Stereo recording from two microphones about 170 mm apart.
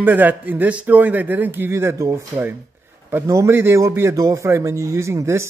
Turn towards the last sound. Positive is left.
turn(degrees=-15)  # may be behind; listen again after turning